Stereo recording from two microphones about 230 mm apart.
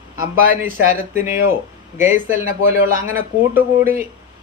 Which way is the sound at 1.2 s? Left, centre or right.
Centre.